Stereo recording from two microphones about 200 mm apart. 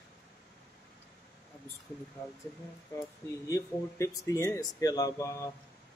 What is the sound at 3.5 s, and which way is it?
Speech, 15° left (ahead or behind).